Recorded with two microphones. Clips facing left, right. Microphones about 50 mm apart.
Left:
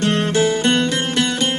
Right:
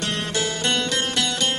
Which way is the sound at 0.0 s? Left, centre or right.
Left.